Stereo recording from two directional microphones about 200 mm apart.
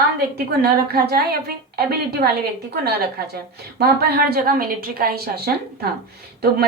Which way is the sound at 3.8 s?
50° right (ahead or behind).